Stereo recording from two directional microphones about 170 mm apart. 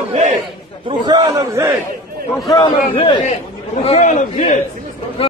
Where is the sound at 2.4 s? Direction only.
25° left (ahead or behind).